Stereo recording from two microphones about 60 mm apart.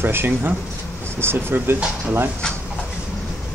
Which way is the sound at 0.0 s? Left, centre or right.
Right.